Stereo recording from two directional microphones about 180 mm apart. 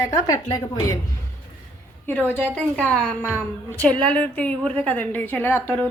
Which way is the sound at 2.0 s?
10° left (ahead or behind).